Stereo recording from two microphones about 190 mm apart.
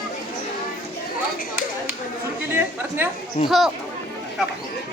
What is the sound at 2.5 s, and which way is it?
Speech, 10° right (ahead or behind).